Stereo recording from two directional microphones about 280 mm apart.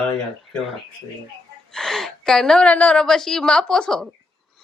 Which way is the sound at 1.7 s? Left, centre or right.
Centre.